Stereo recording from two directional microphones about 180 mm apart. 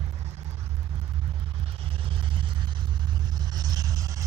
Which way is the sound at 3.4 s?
20° right (ahead or behind).